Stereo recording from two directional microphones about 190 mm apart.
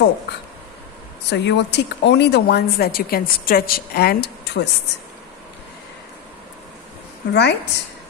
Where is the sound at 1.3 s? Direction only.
65° left (ahead or behind).